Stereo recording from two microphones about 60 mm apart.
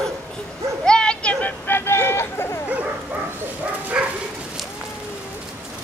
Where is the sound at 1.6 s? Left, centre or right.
Left.